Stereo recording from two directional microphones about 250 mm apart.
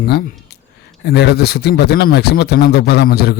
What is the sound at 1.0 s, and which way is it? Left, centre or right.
A man's voice, left.